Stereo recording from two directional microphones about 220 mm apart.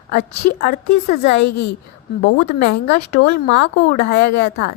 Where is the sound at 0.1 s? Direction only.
45° left (ahead or behind).